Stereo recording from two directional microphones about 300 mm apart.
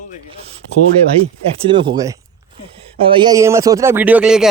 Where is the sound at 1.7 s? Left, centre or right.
Centre.